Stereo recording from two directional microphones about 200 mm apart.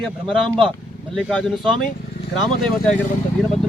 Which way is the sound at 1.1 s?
Centre (ahead or behind).